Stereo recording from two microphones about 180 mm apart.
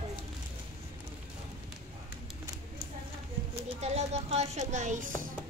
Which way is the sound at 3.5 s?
35° right (ahead or behind).